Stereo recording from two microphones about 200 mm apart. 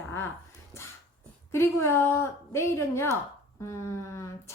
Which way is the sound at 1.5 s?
15° left (ahead or behind).